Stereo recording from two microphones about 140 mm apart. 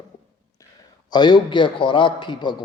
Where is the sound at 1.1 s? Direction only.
30° left (ahead or behind).